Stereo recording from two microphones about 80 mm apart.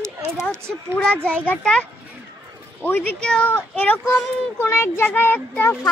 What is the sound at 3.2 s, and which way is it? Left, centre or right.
Speech, centre.